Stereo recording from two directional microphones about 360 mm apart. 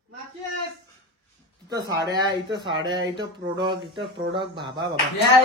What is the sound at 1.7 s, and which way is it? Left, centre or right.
Speech, centre.